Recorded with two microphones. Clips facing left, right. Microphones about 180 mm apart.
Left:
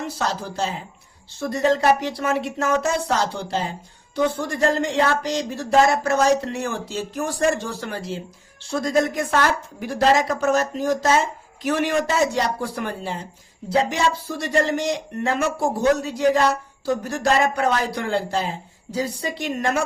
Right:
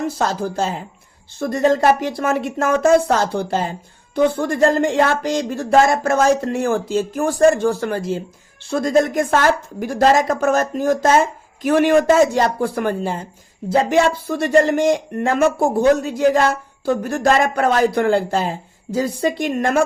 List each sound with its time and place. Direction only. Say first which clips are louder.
0.0 s speech: right 5 dB; 50° right (ahead or behind)